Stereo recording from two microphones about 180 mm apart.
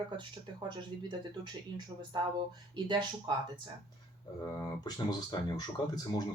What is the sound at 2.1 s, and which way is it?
Speech, 25° right (ahead or behind).